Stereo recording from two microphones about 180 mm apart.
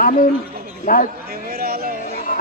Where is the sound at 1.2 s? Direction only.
60° right (ahead or behind).